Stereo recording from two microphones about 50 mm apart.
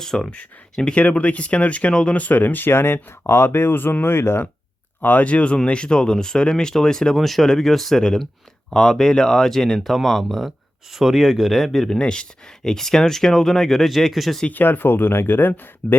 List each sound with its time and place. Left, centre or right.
0.0 s speech: centre
1.0 s speech: left
2.1 s speech: left
5.0 s speech: left; by 11.9 s centre
11.9 s speech: centre
14.5 s speech: left